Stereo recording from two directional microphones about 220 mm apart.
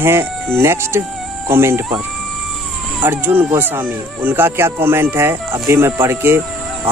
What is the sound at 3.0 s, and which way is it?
Speech, 10° right (ahead or behind).